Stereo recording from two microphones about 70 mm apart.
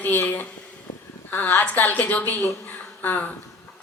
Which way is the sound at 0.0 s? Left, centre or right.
Left.